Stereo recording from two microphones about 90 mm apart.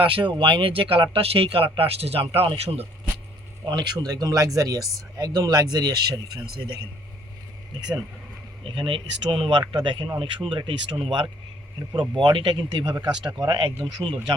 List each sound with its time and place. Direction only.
0.0 s speech: 70° right (ahead or behind); by 2.8 s 90° right
3.7 s speech: 50° right (ahead or behind)
8.6 s speech: 70° right (ahead or behind)
10.2 s speech: 70° right (ahead or behind)